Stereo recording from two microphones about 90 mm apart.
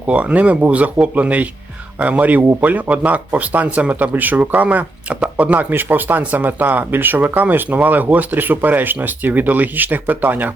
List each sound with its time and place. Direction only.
0.0 s a man's voice: 15° right (ahead or behind)